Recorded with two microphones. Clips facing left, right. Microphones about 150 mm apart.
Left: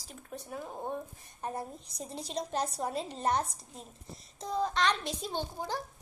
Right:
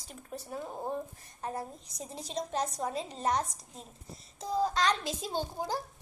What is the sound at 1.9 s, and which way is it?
Speech, centre (ahead or behind).